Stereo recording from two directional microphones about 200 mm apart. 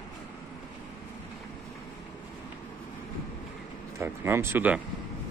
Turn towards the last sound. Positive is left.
turn(degrees=-10)  # may be behind; listen again after turning